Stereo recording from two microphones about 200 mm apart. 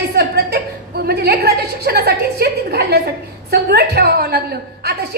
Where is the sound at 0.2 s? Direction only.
50° right (ahead or behind).